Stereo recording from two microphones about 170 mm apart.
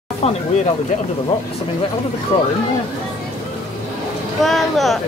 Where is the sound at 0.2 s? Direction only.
35° left (ahead or behind).